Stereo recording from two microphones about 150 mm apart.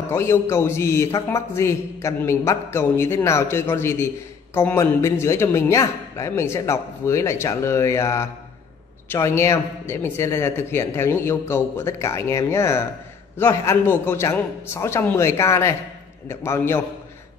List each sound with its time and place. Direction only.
0.1 s a man's voice: 15° left (ahead or behind)